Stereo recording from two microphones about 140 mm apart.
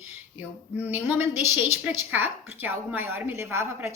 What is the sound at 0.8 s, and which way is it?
A woman's voice, 15° right (ahead or behind).